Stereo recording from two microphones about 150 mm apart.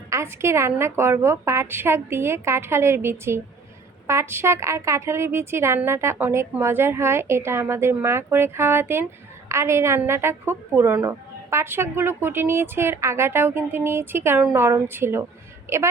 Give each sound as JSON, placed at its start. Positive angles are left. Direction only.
{"t": 0.1, "sound": "speech", "side_deg": -20}